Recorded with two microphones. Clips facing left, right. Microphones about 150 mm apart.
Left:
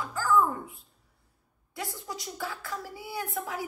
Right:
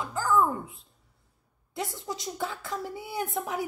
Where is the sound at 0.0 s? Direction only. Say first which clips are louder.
Even; 20° right (ahead or behind).